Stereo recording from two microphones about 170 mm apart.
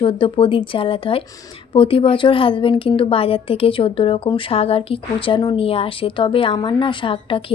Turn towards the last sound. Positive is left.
turn(degrees=30)  # may be behind; listen again after turning